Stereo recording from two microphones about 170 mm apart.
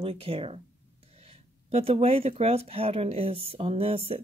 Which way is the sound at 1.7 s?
35° right (ahead or behind).